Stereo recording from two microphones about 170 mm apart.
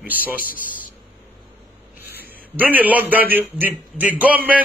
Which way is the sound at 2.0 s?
70° left (ahead or behind).